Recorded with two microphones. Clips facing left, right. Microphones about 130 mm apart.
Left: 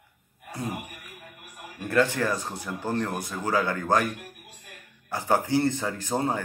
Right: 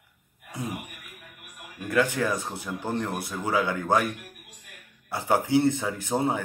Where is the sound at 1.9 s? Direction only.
5° right (ahead or behind).